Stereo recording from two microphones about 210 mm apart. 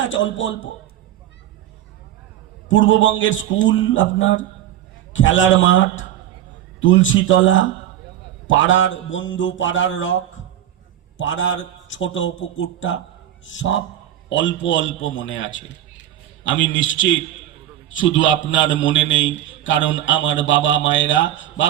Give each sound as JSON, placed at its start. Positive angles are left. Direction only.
{"t": 0.0, "sound": "a man's voice", "side_deg": 65}
{"t": 2.6, "sound": "a man's voice", "side_deg": 65}